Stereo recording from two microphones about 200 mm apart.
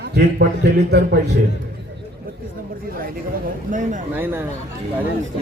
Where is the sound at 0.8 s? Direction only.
55° right (ahead or behind).